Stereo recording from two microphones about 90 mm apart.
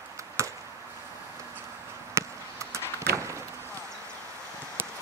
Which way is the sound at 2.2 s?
30° right (ahead or behind).